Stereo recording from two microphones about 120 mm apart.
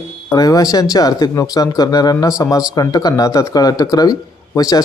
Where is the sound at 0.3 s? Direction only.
30° left (ahead or behind).